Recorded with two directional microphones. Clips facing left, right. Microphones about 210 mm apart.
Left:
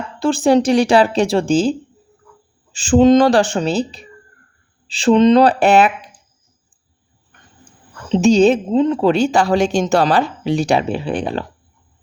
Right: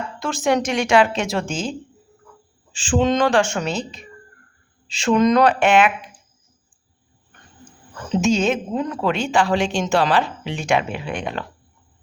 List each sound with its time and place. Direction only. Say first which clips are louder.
0.2 s speech: left 7 dB; 30° left (ahead or behind)
2.7 s speech: left 8 dB; 40° left (ahead or behind)
8.1 s speech: left 7 dB; 35° left (ahead or behind)